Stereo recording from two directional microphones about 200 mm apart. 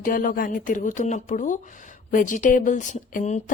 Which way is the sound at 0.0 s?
45° left (ahead or behind).